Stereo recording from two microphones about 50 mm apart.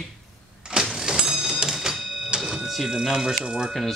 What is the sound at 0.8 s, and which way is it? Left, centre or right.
Printer, centre.